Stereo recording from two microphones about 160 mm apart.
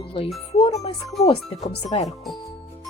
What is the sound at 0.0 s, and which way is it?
Speech, 35° left (ahead or behind).